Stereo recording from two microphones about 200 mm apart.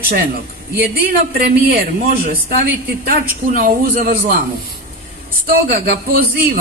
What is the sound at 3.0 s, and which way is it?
A man's voice, 45° right (ahead or behind).